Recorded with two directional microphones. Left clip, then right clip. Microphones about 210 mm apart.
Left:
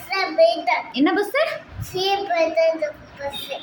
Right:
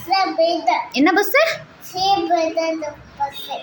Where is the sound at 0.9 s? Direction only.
15° right (ahead or behind).